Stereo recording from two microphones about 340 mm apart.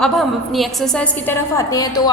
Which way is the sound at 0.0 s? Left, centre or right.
Centre.